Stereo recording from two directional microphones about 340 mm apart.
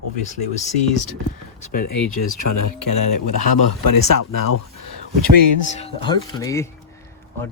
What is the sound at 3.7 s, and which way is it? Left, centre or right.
Speech, left.